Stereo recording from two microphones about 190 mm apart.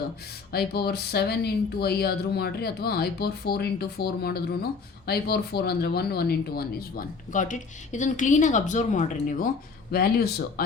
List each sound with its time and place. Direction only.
0.5 s speech: 55° left (ahead or behind)
9.9 s speech: 55° left (ahead or behind)